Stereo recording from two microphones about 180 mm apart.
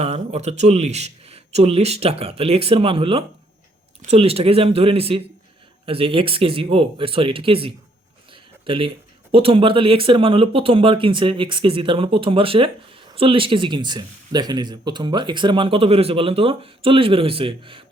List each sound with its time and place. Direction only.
0.0 s a man's voice: 35° right (ahead or behind)
8.3 s a sound: 30° right (ahead or behind)
9.3 s speech: 30° right (ahead or behind)